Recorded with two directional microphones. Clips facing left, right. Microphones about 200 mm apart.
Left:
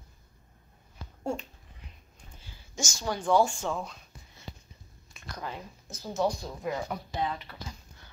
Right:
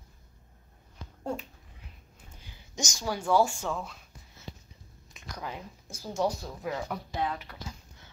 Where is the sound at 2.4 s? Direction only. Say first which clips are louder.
Even; 20° right (ahead or behind).